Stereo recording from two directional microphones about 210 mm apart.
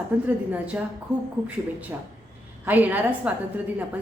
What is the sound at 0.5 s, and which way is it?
Speech, 5° right (ahead or behind).